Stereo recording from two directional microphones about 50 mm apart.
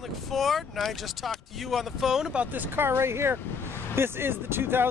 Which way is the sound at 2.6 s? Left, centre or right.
Right.